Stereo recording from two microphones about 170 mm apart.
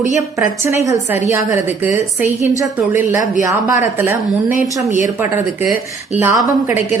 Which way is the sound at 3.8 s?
10° right (ahead or behind).